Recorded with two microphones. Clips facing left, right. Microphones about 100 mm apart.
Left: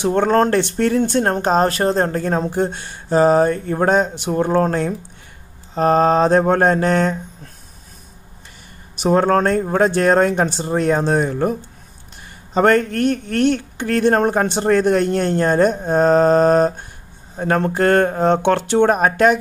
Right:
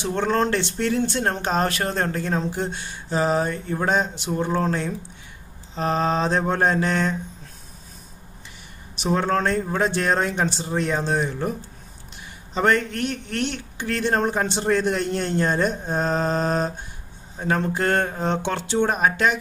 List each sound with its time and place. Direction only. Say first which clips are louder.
0.0 s speech: left 7 dB; 50° left (ahead or behind)
8.9 s speech: left 7 dB; 45° left (ahead or behind)
12.5 s speech: left 6 dB; 45° left (ahead or behind)